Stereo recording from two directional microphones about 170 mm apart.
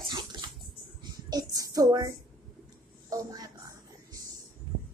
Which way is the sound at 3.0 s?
20° right (ahead or behind).